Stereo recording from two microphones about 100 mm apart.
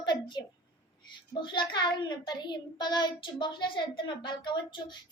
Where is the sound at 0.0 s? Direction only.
45° left (ahead or behind).